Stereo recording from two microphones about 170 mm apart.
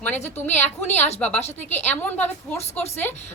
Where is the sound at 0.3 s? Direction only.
10° left (ahead or behind).